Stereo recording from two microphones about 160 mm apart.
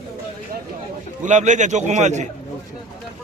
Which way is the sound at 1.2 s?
50° right (ahead or behind).